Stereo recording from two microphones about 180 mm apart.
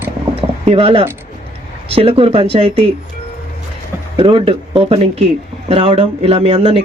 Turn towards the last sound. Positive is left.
turn(degrees=-30)  # may be behind; listen again after turning